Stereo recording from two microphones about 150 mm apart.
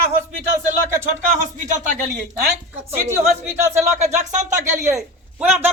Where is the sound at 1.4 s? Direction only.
55° right (ahead or behind).